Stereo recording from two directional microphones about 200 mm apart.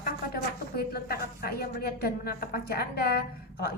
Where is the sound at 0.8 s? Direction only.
50° left (ahead or behind).